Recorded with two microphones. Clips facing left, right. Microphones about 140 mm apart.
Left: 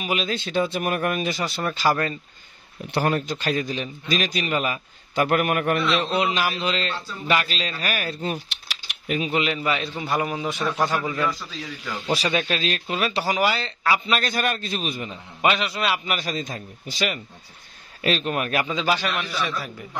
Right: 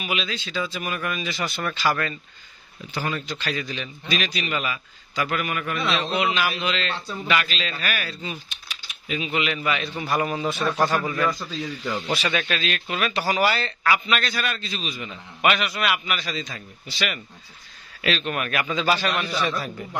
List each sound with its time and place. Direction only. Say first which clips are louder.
0.0 s a man's voice: left 3 dB; 45° left (ahead or behind)
1.4 s a man's voice: right 2 dB; 30° left (ahead or behind)
2.9 s a man's voice: left 6 dB; 60° left (ahead or behind)
6.1 s a man's voice: left 1 dB; 35° left (ahead or behind)
9.3 s a man's voice: even; 30° left (ahead or behind); by 11.1 s 10° left (ahead or behind)
12.1 s a man's voice: left 4 dB; 35° left (ahead or behind)
13.3 s a man's voice: right 3 dB; 15° left (ahead or behind)
14.2 s a man's voice: left 3 dB; 50° left (ahead or behind)
15.0 s a man's voice: left 2 dB; 30° left (ahead or behind)
16.1 s a man's voice: left 2 dB; 45° left (ahead or behind)
18.3 s a man's voice: left 2 dB; 30° left (ahead or behind)
18.7 s a man's voice: right 1 dB; 15° left (ahead or behind)